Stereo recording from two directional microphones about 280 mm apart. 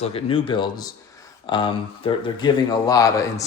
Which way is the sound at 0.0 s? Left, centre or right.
Centre.